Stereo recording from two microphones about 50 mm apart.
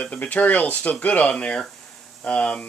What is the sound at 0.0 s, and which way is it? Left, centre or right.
Speech, left.